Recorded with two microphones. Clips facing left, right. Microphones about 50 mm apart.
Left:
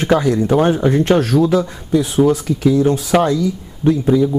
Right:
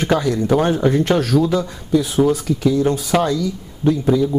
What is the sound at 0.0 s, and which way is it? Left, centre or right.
Speech, centre.